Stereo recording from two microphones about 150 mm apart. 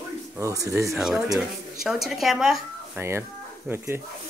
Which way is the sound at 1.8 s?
Centre (ahead or behind).